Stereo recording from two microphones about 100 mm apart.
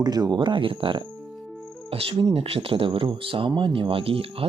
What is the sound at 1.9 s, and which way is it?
Speech, 75° right (ahead or behind).